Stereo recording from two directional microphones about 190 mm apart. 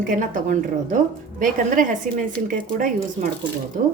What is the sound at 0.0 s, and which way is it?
Speech, 45° right (ahead or behind).